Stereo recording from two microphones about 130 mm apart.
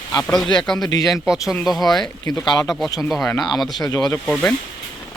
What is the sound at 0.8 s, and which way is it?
Speech, 30° left (ahead or behind).